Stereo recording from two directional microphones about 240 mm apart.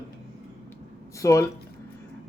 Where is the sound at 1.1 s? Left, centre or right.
Centre.